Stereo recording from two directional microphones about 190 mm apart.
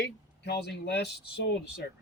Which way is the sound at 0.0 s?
60° left (ahead or behind).